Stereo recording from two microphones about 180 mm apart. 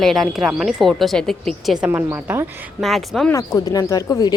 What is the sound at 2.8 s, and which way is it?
Speech, centre (ahead or behind).